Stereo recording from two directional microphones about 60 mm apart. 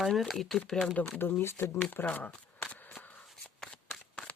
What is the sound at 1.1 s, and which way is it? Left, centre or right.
Speech, left.